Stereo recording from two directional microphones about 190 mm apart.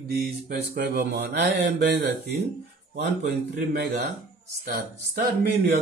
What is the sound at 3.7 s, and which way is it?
Speech, 55° right (ahead or behind).